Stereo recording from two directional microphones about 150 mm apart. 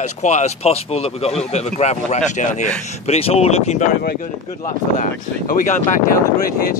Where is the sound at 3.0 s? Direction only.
40° left (ahead or behind).